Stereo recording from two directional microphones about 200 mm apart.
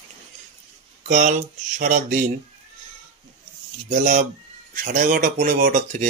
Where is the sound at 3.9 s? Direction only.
40° right (ahead or behind).